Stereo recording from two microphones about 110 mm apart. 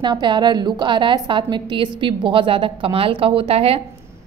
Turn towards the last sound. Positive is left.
turn(degrees=-60)  # may be behind; listen again after turning